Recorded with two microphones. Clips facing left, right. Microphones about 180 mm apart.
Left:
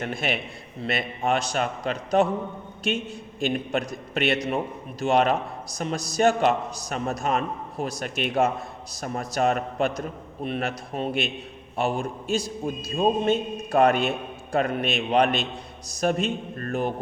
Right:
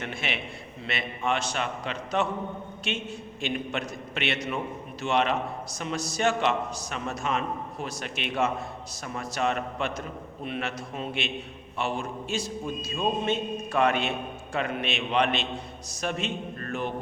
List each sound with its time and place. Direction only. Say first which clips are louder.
0.0 s a man's voice: left 5 dB; 40° left (ahead or behind)